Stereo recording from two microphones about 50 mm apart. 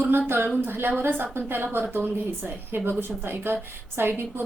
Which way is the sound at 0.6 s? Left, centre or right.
Right.